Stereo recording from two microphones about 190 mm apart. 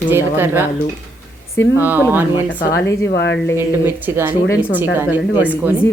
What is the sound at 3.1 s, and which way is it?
Speech, 65° left (ahead or behind).